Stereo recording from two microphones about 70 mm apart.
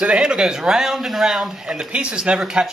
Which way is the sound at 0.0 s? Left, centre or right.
Centre.